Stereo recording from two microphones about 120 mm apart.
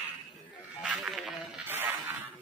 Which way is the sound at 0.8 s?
Centre (ahead or behind).